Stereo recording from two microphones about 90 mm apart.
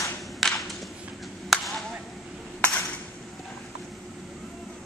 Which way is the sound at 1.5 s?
Centre (ahead or behind).